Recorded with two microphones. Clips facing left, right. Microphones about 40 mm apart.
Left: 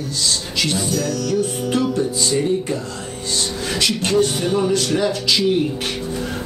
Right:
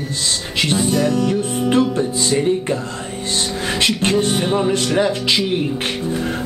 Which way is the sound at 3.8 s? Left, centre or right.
Right.